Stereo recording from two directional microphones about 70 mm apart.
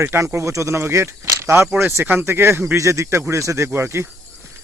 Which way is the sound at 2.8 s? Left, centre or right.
Right.